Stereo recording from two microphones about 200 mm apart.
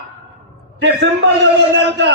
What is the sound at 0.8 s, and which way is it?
A man's voice, 60° right (ahead or behind).